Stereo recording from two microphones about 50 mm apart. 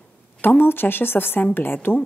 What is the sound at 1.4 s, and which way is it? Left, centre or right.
Speech, left.